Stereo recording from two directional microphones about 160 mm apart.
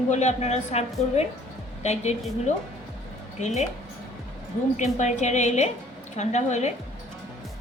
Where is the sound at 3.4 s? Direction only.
45° left (ahead or behind).